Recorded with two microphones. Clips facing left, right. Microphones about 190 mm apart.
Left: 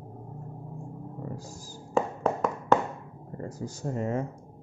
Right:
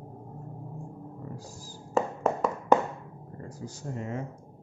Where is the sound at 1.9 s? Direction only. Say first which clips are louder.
Even; 5° right (ahead or behind).